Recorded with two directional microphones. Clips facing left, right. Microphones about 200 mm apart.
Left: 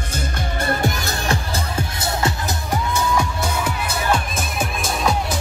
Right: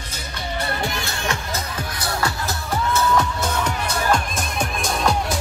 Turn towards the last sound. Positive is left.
turn(degrees=5)  # may be behind; listen again after turning